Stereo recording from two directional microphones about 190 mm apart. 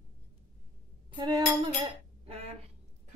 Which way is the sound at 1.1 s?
25° right (ahead or behind).